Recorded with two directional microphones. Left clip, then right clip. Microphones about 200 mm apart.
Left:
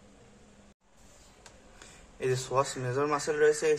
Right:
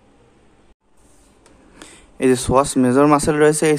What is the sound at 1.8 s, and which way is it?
Speech, 55° right (ahead or behind).